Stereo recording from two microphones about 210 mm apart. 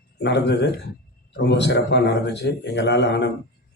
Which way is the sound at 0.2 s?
55° left (ahead or behind).